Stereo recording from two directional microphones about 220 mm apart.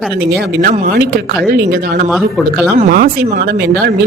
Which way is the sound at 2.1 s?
Centre (ahead or behind).